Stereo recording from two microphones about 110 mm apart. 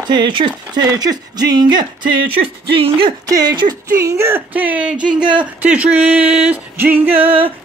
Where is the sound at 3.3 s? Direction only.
40° right (ahead or behind).